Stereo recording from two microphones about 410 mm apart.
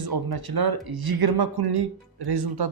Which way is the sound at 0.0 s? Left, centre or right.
Right.